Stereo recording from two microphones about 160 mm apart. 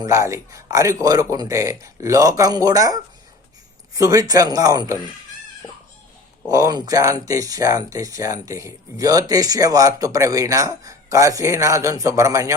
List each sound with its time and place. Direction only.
0.0 s speech: 20° right (ahead or behind)
6.5 s speech: 25° right (ahead or behind)